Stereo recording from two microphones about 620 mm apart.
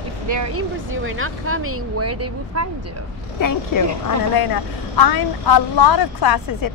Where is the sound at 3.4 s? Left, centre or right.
Left.